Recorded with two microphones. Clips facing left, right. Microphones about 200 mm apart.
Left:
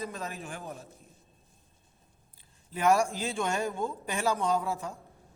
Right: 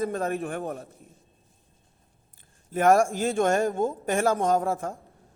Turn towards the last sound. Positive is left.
turn(degrees=-50)  # may be behind; listen again after turning